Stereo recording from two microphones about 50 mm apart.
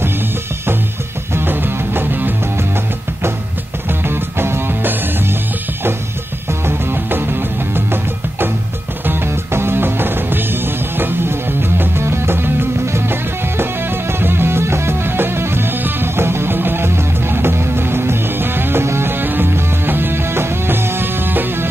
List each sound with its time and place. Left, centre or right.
1.3 s music: right
4.0 s music: right
6.6 s music: right